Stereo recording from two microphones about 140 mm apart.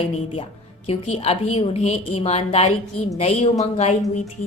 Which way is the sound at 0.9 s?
45° left (ahead or behind).